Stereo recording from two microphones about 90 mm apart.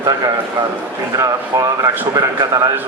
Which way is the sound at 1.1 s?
40° right (ahead or behind).